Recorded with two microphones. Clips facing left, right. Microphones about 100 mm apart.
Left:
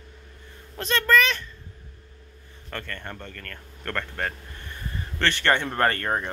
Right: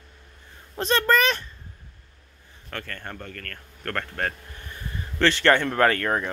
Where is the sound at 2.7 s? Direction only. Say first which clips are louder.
Even; 5° right (ahead or behind).